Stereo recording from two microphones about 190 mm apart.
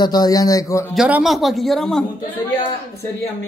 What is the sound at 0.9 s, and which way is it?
Speech, 5° right (ahead or behind).